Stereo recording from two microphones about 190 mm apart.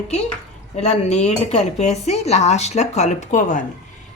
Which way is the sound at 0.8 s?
35° left (ahead or behind).